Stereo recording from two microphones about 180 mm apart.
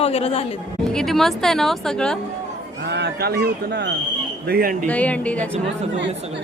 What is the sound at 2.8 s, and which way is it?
Speech, 70° right (ahead or behind).